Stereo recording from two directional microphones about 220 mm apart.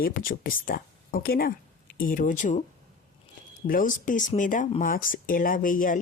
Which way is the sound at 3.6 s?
40° left (ahead or behind).